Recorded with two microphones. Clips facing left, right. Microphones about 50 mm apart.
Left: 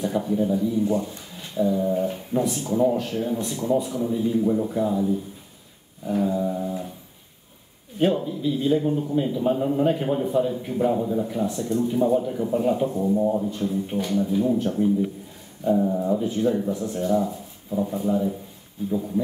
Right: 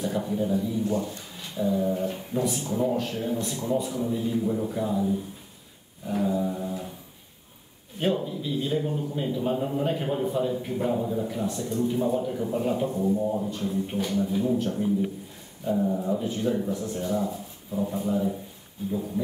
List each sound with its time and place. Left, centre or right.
0.0 s a man's voice: centre
0.8 s speech: centre
1.3 s a sound: centre
2.4 s a man's voice: centre
8.0 s a man's voice: centre
13.1 s speech: centre
13.4 s a man's voice: centre